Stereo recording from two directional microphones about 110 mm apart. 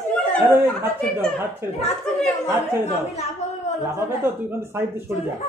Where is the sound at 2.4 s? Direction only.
25° right (ahead or behind).